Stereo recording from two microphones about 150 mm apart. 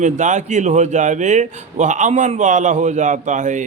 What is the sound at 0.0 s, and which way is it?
A man's voice, 55° right (ahead or behind).